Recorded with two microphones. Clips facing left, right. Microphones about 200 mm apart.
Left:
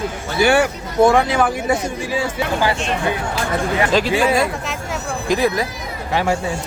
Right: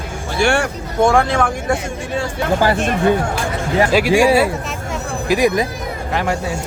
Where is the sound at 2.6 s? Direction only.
50° right (ahead or behind).